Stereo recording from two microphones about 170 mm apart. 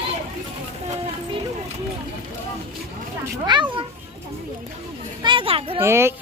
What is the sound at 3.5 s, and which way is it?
Cat, 30° right (ahead or behind).